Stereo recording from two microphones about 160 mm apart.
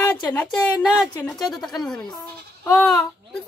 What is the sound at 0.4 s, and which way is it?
Speech, 5° left (ahead or behind).